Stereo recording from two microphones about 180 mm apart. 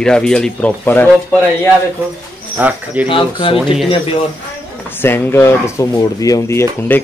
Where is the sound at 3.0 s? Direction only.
30° left (ahead or behind).